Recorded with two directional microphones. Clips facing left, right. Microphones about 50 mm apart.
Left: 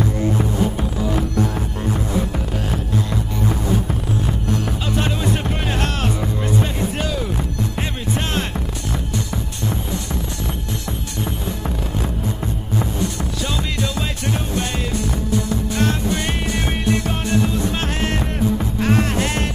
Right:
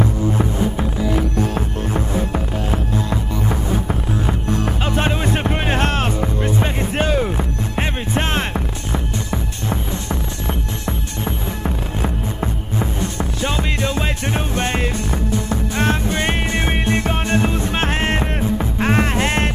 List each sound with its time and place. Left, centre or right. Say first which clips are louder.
0.0 s music: right 1 dB; right
1.5 s music: right 2 dB; right